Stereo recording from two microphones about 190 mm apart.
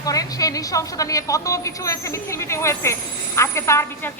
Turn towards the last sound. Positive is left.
turn(degrees=15)  # may be behind; listen again after turning